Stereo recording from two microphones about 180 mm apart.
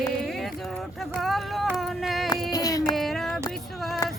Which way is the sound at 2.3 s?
20° left (ahead or behind).